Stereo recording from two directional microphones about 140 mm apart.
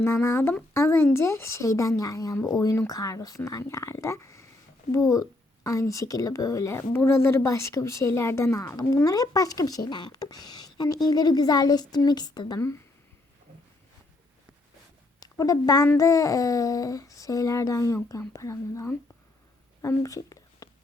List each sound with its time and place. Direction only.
0.0 s a woman's voice: 20° left (ahead or behind)
5.6 s a woman's voice: 20° left (ahead or behind)
15.2 s a woman's voice: 25° left (ahead or behind)